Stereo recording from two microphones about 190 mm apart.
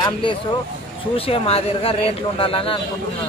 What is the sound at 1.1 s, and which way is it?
Speech, 30° left (ahead or behind).